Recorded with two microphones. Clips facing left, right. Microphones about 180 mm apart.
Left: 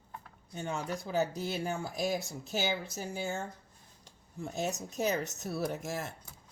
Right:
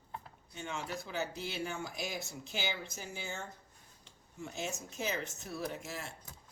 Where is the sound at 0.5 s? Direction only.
40° left (ahead or behind).